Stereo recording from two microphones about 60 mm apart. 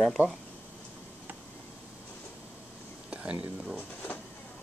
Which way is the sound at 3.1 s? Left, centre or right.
Right.